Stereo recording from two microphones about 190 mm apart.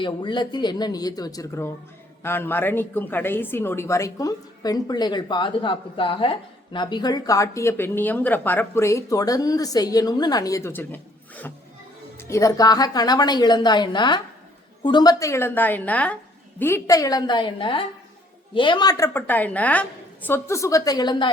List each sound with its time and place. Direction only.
0.0 s a woman's voice: 25° left (ahead or behind)